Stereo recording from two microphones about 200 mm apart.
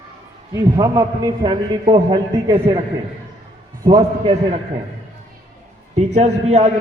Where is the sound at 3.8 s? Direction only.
20° right (ahead or behind).